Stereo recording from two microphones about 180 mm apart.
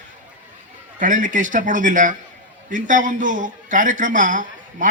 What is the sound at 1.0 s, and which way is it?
Speech, 45° right (ahead or behind).